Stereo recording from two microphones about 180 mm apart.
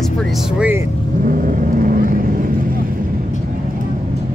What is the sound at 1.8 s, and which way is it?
Vehicle, 50° right (ahead or behind).